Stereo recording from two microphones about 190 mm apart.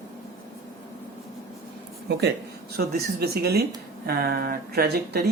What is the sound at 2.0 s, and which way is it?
Speech, 60° right (ahead or behind).